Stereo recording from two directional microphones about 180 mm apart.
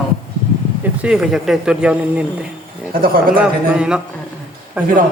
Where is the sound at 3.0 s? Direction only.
50° right (ahead or behind).